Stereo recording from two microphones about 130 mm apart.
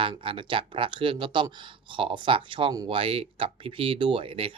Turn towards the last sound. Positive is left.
turn(degrees=-45)  # may be behind; listen again after turning